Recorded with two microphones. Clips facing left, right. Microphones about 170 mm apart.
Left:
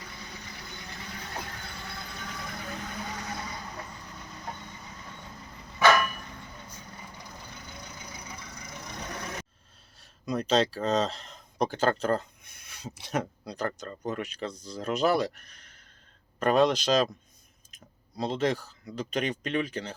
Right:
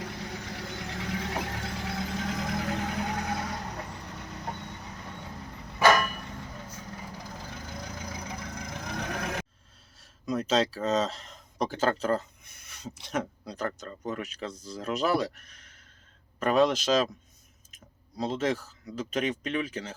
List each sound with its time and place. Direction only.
0.0 s vehicle: 80° right
5.8 s vehicle: 40° right (ahead or behind)
7.3 s vehicle: 90° right
10.0 s speech: centre (ahead or behind)
18.2 s speech: centre (ahead or behind)